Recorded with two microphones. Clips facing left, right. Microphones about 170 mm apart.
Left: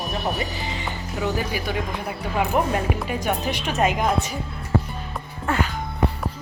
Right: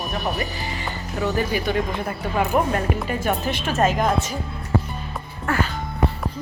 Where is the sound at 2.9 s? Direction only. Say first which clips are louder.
Right 1 dB; 5° left (ahead or behind).